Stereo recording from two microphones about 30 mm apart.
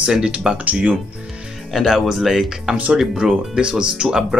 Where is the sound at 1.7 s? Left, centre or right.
Centre.